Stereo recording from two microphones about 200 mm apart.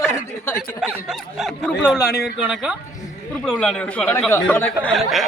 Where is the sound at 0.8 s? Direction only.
5° right (ahead or behind).